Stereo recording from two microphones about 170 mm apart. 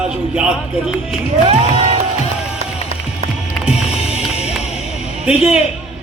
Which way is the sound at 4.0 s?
40° left (ahead or behind).